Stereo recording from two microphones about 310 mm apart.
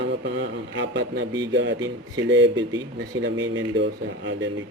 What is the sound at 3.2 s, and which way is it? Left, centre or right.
Speech, right.